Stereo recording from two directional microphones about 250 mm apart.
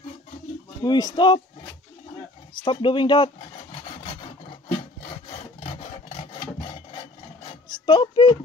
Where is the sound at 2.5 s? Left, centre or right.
Centre.